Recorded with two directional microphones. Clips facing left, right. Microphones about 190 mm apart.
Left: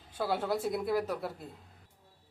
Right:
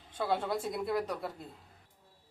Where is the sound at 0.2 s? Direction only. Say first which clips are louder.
Left 1 dB; 5° left (ahead or behind).